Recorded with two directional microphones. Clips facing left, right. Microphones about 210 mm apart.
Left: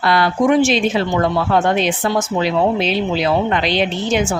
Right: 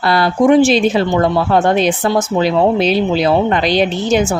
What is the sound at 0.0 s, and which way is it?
Speech, 35° right (ahead or behind).